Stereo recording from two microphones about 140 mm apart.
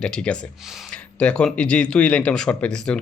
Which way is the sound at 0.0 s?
5° left (ahead or behind).